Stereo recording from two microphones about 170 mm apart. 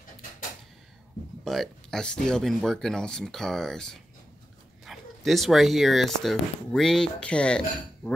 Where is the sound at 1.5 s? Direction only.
Centre (ahead or behind).